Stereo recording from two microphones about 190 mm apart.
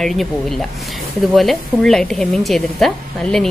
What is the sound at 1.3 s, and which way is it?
A woman's voice, centre (ahead or behind).